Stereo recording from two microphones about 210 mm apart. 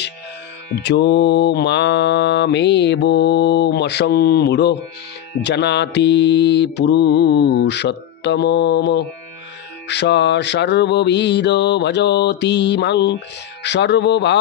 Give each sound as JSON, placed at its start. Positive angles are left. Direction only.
{"t": 0.7, "sound": "music", "side_deg": 50}